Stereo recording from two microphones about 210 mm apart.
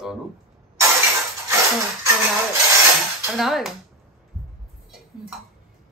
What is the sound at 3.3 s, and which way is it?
Speech, centre (ahead or behind).